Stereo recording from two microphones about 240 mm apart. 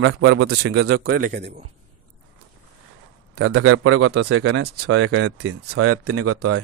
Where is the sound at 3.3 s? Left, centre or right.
Right.